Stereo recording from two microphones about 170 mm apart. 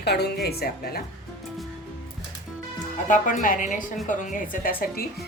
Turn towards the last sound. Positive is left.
turn(degrees=60)  # may be behind; listen again after turning